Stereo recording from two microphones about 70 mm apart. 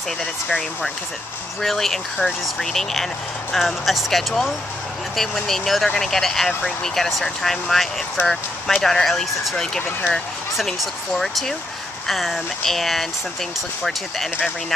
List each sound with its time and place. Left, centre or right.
0.2 s speech: centre